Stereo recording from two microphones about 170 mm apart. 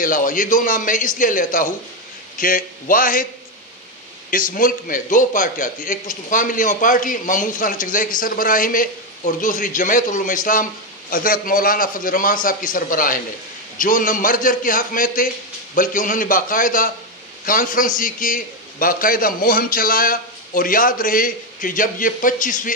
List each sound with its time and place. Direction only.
0.0 s a man's voice: 55° left (ahead or behind)
4.3 s a man's voice: 55° left (ahead or behind)